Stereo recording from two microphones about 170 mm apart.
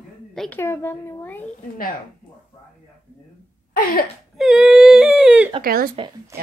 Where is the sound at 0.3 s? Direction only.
5° left (ahead or behind).